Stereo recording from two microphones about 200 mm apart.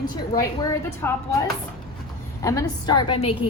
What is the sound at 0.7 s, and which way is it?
A woman's voice, 15° left (ahead or behind).